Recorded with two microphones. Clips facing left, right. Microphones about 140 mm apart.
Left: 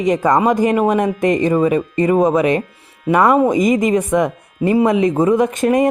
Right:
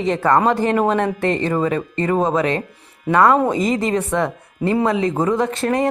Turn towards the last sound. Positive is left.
turn(degrees=15)  # may be behind; listen again after turning